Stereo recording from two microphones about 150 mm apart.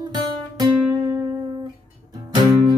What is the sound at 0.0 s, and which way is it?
Guitar, 25° right (ahead or behind).